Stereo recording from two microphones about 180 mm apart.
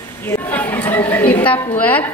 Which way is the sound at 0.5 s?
10° left (ahead or behind).